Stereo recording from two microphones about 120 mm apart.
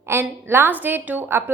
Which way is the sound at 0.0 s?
20° right (ahead or behind).